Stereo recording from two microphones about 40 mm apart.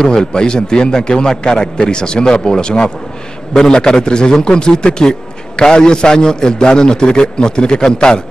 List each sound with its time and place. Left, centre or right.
0.0 s a man's voice: centre